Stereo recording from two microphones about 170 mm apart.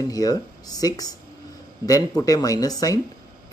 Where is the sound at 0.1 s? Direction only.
20° left (ahead or behind).